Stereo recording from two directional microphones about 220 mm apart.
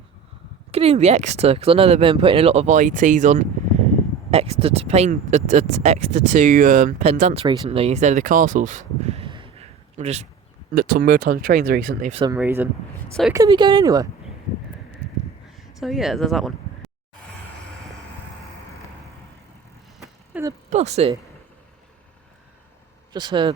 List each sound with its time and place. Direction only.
0.7 s speech: 30° right (ahead or behind)
10.8 s speech: 45° right (ahead or behind)
12.1 s speech: 20° right (ahead or behind)
15.8 s speech: centre (ahead or behind)
20.3 s a sound: 5° right (ahead or behind)
20.7 s speech: 30° right (ahead or behind)
23.1 s speech: 20° right (ahead or behind)